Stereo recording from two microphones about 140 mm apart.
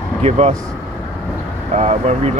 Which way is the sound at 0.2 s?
50° right (ahead or behind).